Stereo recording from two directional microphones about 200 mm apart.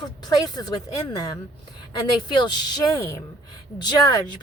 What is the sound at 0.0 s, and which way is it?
A woman's voice, 20° left (ahead or behind).